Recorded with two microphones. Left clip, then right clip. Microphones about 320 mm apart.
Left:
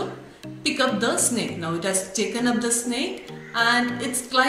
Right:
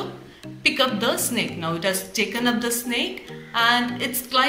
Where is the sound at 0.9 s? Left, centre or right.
Centre.